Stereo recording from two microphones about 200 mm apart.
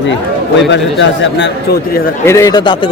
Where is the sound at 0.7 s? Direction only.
65° left (ahead or behind).